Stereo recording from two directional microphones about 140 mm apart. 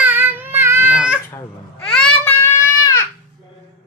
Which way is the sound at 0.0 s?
15° right (ahead or behind).